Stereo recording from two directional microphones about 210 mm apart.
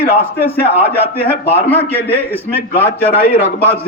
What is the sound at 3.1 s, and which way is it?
Speech, 45° left (ahead or behind).